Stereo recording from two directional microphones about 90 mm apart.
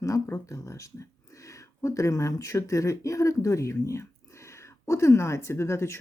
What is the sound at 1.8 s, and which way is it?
Speech, 35° left (ahead or behind).